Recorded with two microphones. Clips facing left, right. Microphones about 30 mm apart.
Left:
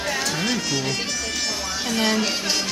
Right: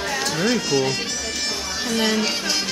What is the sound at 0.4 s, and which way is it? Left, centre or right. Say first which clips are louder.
Speech: right 4 dB; centre.